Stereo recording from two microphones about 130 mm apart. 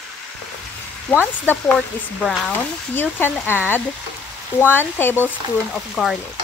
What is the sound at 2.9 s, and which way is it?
Frying, 15° left (ahead or behind).